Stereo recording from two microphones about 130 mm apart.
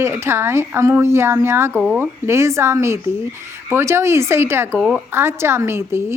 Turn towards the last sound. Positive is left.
turn(degrees=-20)  # may be behind; listen again after turning